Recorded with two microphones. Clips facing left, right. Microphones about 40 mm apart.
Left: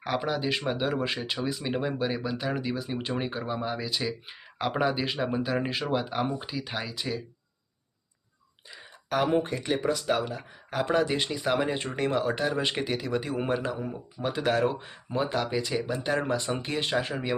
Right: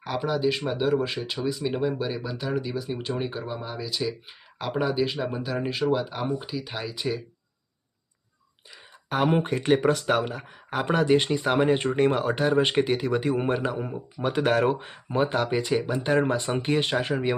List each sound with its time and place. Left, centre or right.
0.0 s speech: centre
6.9 s speech: centre
9.0 s speech: centre
9.4 s speech: right; by 13.7 s centre
13.7 s speech: right